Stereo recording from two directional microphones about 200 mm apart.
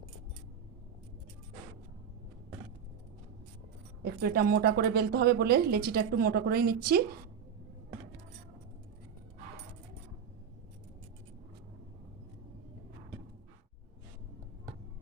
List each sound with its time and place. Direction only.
4.0 s speech: 50° right (ahead or behind)